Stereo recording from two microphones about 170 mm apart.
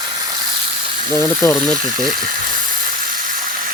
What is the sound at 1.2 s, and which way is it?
Speech, 20° left (ahead or behind).